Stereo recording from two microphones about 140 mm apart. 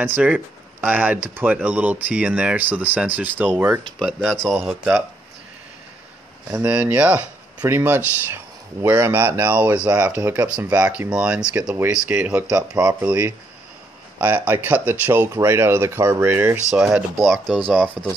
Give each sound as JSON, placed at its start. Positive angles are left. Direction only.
{"t": 0.0, "sound": "speech", "side_deg": -10}
{"t": 3.8, "sound": "speech", "side_deg": 0}
{"t": 6.6, "sound": "speech", "side_deg": -10}